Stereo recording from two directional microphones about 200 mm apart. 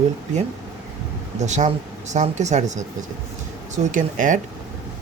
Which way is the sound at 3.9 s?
40° right (ahead or behind).